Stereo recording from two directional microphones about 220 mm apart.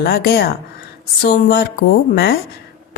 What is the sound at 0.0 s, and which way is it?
A woman's voice, 45° left (ahead or behind).